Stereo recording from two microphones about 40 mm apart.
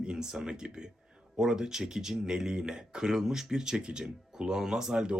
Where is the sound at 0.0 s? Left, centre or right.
Centre.